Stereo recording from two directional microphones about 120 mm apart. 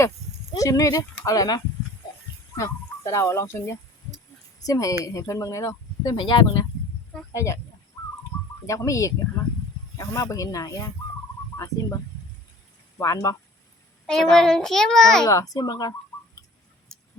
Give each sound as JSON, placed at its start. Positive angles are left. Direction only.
{"t": 0.5, "sound": "speech", "side_deg": 30}
{"t": 6.1, "sound": "speech", "side_deg": 40}
{"t": 7.3, "sound": "speech", "side_deg": 25}
{"t": 8.6, "sound": "speech", "side_deg": 25}
{"t": 13.0, "sound": "speech", "side_deg": 30}
{"t": 14.1, "sound": "a child's voice", "side_deg": 5}
{"t": 15.3, "sound": "speech", "side_deg": 30}